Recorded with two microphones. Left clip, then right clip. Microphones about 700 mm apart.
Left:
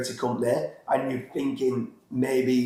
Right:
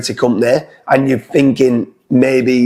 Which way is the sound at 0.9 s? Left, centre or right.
Right.